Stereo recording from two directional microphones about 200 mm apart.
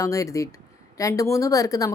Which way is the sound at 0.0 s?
15° left (ahead or behind).